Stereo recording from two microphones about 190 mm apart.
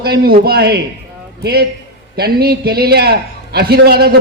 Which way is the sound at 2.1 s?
55° right (ahead or behind).